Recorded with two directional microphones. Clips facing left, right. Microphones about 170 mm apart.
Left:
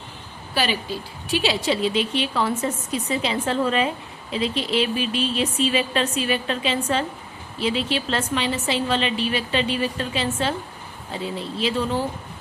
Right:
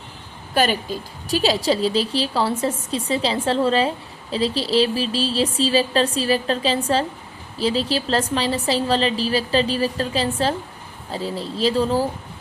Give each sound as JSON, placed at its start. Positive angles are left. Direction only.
{"t": 0.5, "sound": "a woman's voice", "side_deg": -45}